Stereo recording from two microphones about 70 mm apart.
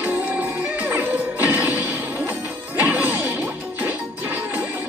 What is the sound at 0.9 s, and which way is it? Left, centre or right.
Music, centre.